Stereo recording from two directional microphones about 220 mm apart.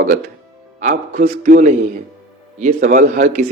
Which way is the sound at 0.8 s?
35° right (ahead or behind).